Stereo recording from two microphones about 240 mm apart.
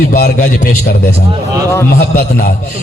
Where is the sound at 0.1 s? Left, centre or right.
Left.